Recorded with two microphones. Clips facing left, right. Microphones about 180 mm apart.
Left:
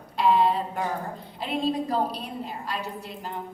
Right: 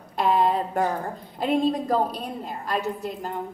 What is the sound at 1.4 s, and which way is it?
A woman's voice, 45° right (ahead or behind).